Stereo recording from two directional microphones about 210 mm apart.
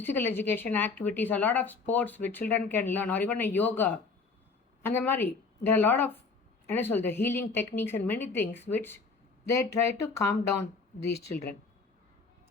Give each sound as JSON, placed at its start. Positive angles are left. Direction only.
{"t": 0.0, "sound": "speech", "side_deg": 10}
{"t": 11.1, "sound": "speech", "side_deg": 50}